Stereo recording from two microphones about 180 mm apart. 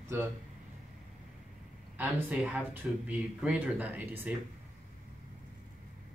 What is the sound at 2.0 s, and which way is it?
Speech, 10° right (ahead or behind).